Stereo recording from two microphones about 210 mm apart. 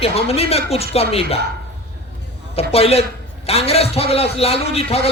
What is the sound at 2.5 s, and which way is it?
A man's voice, 30° left (ahead or behind).